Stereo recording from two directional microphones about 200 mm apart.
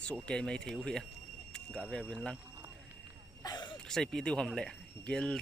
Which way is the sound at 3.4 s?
20° left (ahead or behind).